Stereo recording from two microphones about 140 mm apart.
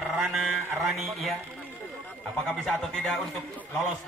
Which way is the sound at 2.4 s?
5° left (ahead or behind).